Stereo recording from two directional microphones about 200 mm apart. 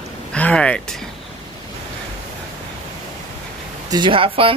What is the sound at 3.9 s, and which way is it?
Speech, 25° right (ahead or behind).